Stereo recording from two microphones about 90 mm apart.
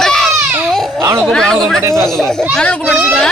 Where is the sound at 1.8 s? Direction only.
35° right (ahead or behind).